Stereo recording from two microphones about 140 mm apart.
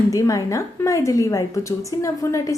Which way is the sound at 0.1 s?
25° left (ahead or behind).